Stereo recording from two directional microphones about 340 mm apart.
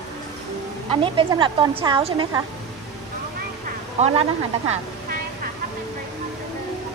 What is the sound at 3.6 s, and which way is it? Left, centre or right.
A woman's voice, centre.